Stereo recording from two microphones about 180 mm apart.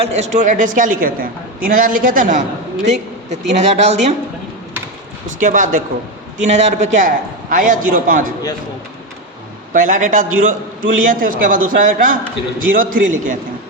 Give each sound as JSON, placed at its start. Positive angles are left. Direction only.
{"t": 0.0, "sound": "a man's voice", "side_deg": -40}
{"t": 5.4, "sound": "a man's voice", "side_deg": -45}
{"t": 9.7, "sound": "a man's voice", "side_deg": -45}